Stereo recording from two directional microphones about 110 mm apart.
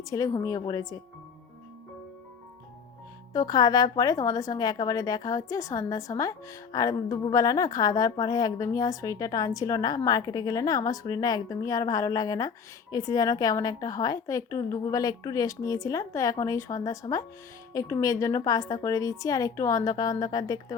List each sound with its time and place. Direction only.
0.0 s a woman's voice: 35° left (ahead or behind)
3.3 s a woman's voice: 35° left (ahead or behind)